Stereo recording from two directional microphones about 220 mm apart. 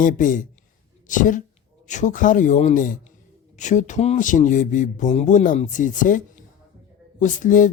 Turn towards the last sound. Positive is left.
turn(degrees=35)  # may be behind; listen again after turning